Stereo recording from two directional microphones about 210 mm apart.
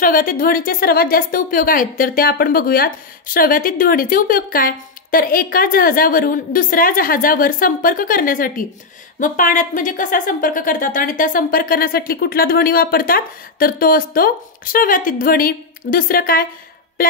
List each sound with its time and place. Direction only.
0.0 s a woman's voice: 45° left (ahead or behind)